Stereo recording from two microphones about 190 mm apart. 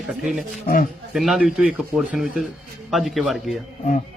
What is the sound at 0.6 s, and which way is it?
Speech, 50° left (ahead or behind).